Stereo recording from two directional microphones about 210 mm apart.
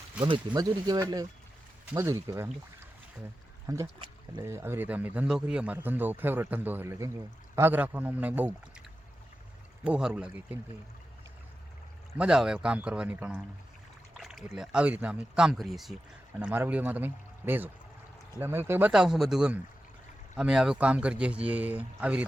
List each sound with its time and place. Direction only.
0.2 s speech: 20° right (ahead or behind)
3.7 s speech: 15° right (ahead or behind)
9.8 s speech: 5° right (ahead or behind)
12.1 s speech: 5° right (ahead or behind)